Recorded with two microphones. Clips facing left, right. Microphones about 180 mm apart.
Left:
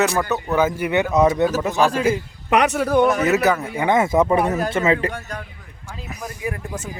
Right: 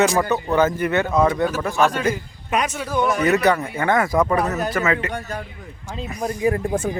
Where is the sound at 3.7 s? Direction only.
20° left (ahead or behind).